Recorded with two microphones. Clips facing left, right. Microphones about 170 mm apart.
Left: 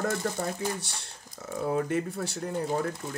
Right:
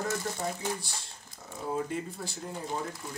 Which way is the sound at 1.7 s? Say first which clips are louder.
Left 4 dB; 70° left (ahead or behind).